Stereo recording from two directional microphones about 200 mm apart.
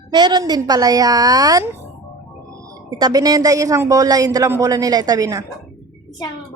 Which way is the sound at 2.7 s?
20° right (ahead or behind).